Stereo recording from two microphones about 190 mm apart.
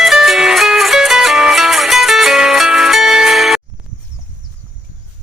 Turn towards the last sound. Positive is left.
turn(degrees=0)  # may be behind; listen again after turning